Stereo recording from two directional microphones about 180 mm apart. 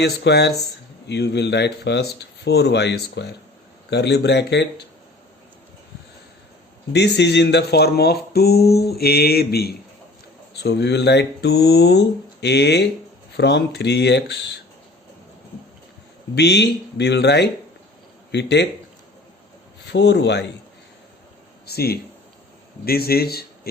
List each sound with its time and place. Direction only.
0.0 s speech: 65° left (ahead or behind)
6.9 s speech: 70° left (ahead or behind)
16.3 s speech: 70° left (ahead or behind)
19.9 s speech: 70° left (ahead or behind)
21.7 s speech: 60° left (ahead or behind)